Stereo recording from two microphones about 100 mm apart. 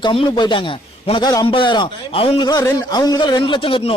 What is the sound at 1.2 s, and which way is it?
Speech, 40° left (ahead or behind).